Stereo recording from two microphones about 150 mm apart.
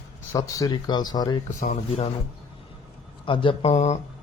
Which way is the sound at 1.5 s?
55° left (ahead or behind).